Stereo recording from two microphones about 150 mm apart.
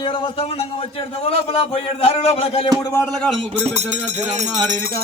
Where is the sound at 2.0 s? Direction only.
40° left (ahead or behind).